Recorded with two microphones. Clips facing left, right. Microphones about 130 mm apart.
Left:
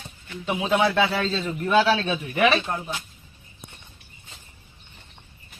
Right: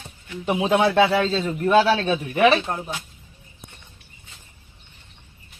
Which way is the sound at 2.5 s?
5° right (ahead or behind).